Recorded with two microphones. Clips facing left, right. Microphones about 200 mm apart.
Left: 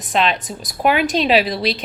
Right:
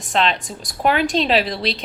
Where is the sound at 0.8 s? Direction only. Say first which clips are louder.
Left 1 dB; 10° left (ahead or behind).